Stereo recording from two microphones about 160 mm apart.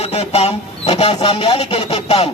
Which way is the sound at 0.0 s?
40° left (ahead or behind).